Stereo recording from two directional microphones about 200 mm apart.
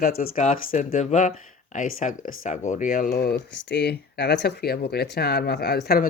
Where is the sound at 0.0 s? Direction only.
50° left (ahead or behind).